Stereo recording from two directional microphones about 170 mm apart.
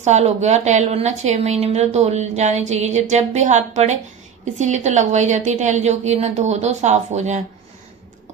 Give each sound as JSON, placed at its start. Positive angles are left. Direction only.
{"t": 0.0, "sound": "a woman's voice", "side_deg": -40}